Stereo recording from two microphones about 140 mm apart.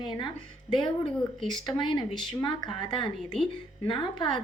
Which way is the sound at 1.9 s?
35° left (ahead or behind).